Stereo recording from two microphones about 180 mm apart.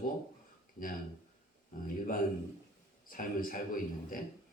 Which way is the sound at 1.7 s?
50° left (ahead or behind).